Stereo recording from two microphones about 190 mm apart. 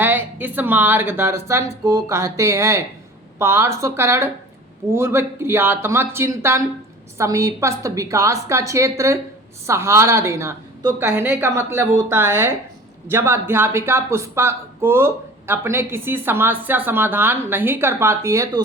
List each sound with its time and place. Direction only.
0.0 s speech: 10° right (ahead or behind)